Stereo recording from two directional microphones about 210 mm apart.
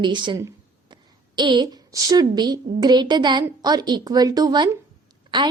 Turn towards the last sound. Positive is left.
turn(degrees=-20)  # may be behind; listen again after turning